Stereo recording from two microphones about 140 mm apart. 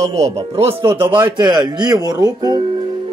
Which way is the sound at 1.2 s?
35° right (ahead or behind).